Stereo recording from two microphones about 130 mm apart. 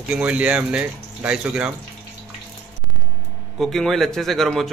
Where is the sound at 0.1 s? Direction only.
10° right (ahead or behind).